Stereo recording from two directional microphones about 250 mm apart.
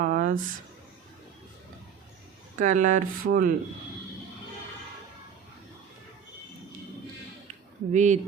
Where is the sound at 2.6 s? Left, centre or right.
Right.